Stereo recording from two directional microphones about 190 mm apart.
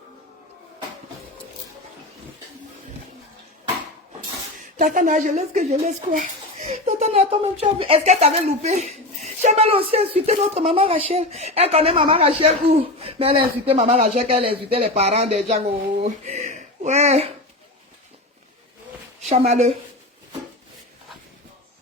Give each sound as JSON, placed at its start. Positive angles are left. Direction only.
{"t": 4.8, "sound": "speech", "side_deg": -45}
{"t": 19.3, "sound": "speech", "side_deg": -35}